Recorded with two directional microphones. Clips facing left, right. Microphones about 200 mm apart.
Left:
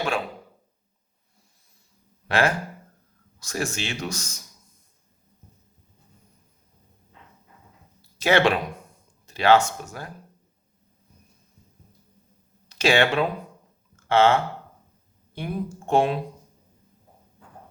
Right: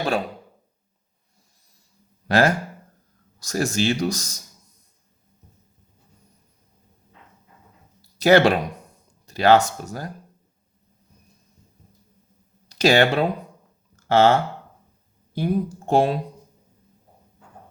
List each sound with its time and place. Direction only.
2.2 s speech: 40° right (ahead or behind)
8.2 s speech: 40° right (ahead or behind)
12.6 s speech: 40° right (ahead or behind)
13.9 s a sound: 40° right (ahead or behind)
15.4 s speech: 35° right (ahead or behind)